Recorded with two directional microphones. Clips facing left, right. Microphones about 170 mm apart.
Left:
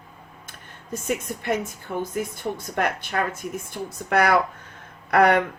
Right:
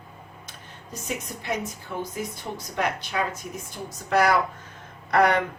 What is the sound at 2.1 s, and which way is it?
Speech, 55° left (ahead or behind).